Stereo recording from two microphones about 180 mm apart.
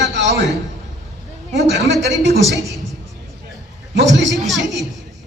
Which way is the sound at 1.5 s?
80° right.